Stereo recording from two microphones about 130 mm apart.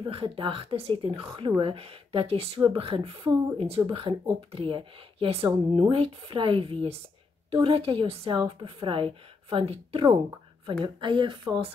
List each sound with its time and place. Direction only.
0.0 s a woman's voice: 45° right (ahead or behind)